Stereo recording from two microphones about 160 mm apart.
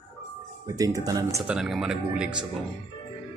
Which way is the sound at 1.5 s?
Centre (ahead or behind).